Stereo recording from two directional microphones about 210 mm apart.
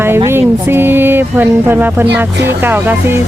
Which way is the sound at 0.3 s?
10° right (ahead or behind).